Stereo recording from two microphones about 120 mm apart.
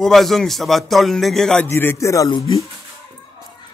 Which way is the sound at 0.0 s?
Centre (ahead or behind).